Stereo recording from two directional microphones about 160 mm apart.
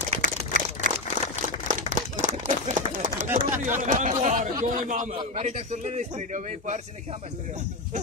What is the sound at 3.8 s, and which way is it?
A man's voice, 50° right (ahead or behind).